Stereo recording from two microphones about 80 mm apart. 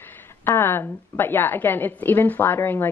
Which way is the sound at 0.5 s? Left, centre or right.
Left.